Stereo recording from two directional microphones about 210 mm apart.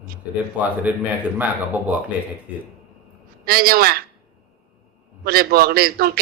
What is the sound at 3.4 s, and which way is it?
Speech, 45° right (ahead or behind).